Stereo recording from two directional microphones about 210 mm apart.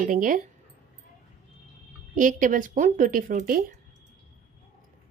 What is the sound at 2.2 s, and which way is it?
Speech, 40° right (ahead or behind).